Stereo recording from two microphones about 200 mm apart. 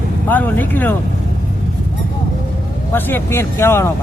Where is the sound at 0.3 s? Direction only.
10° left (ahead or behind).